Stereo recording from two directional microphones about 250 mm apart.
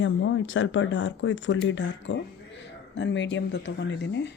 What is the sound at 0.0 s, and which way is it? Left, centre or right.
A woman's voice, left.